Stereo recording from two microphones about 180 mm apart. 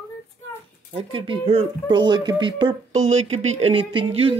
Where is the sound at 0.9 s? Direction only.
30° right (ahead or behind).